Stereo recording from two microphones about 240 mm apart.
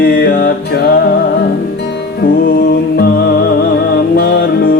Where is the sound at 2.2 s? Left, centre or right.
Left.